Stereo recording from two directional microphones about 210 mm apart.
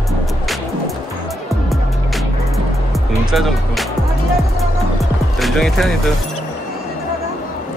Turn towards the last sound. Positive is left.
turn(degrees=0)  # may be behind; listen again after turning